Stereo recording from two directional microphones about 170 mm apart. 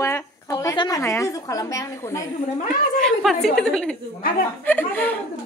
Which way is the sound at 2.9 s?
Centre (ahead or behind).